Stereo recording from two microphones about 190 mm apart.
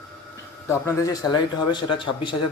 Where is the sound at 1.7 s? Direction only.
25° left (ahead or behind).